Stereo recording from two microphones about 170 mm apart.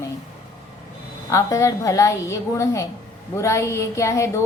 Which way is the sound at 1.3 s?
20° left (ahead or behind).